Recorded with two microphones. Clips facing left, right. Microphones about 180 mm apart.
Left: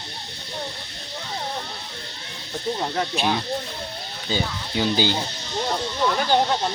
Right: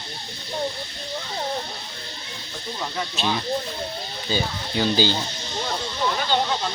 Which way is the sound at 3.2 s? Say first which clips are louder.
Right 4 dB; 15° left (ahead or behind).